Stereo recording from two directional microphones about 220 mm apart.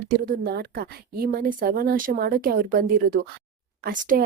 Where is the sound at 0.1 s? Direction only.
40° right (ahead or behind).